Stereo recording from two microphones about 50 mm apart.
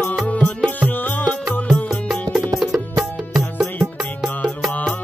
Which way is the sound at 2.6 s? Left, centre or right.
Centre.